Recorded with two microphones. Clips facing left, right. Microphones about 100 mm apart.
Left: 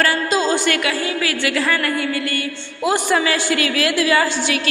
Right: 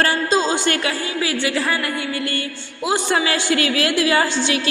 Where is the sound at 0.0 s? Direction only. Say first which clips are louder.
Even; 25° right (ahead or behind).